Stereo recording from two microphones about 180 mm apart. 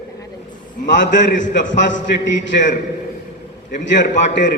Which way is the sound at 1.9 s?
90° left.